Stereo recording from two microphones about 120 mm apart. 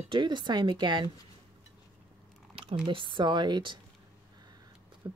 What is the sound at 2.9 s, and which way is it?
Speech, 45° right (ahead or behind).